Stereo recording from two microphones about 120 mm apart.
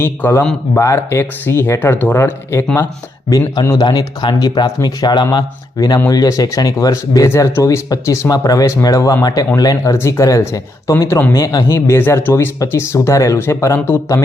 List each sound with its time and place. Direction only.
0.0 s speech: 20° left (ahead or behind)